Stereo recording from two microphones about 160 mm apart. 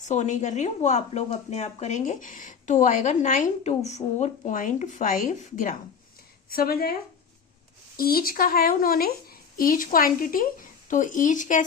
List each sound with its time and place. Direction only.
0.0 s a woman's voice: 45° left (ahead or behind)
6.5 s speech: 70° left (ahead or behind)
7.9 s speech: 65° left (ahead or behind)